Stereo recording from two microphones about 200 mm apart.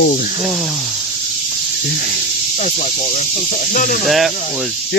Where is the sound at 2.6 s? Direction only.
35° left (ahead or behind).